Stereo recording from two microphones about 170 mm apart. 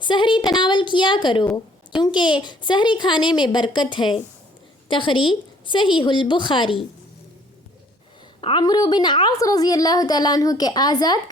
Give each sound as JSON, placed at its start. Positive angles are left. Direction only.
{"t": 0.0, "sound": "a woman's voice", "side_deg": 30}
{"t": 8.4, "sound": "a woman's voice", "side_deg": 30}